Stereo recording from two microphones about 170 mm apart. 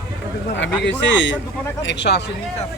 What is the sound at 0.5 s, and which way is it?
Speech, 90° left.